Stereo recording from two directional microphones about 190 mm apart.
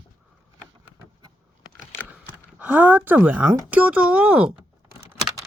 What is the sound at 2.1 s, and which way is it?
Speech, 10° right (ahead or behind).